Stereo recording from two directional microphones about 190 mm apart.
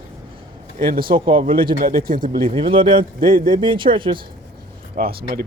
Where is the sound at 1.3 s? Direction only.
30° right (ahead or behind).